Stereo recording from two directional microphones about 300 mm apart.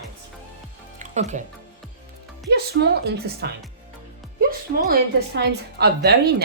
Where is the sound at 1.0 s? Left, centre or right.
Right.